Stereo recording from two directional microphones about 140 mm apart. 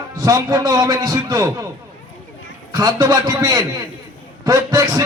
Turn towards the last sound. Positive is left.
turn(degrees=-25)  # may be behind; listen again after turning